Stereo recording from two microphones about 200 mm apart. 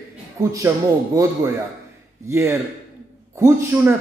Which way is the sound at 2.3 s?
15° right (ahead or behind).